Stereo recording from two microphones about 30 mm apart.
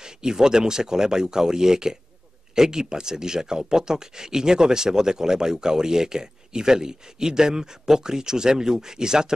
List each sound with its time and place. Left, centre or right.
0.0 s speech: right